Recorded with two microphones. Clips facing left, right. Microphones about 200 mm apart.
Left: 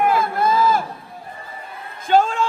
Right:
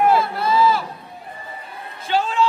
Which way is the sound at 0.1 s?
50° left (ahead or behind).